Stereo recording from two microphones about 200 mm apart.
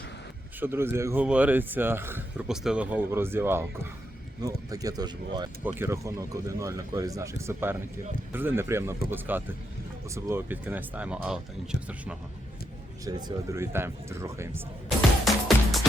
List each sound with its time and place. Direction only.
0.6 s speech: 10° right (ahead or behind)
13.1 s speech: 20° right (ahead or behind)
14.8 s music: centre (ahead or behind)